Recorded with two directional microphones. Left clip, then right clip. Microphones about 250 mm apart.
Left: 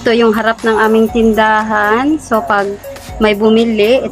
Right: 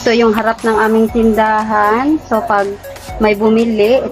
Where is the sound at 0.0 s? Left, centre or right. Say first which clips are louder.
Left 1 dB; centre.